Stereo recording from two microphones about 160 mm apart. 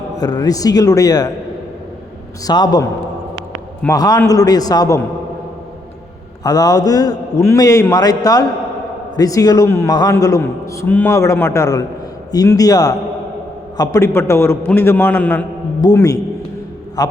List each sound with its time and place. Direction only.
0.2 s a man's voice: 25° left (ahead or behind)
2.5 s a man's voice: 25° left (ahead or behind)
3.8 s a man's voice: 25° left (ahead or behind)
6.4 s a man's voice: 25° left (ahead or behind)
15.8 s a man's voice: 20° left (ahead or behind)